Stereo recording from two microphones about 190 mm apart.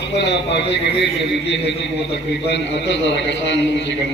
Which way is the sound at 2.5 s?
65° left (ahead or behind).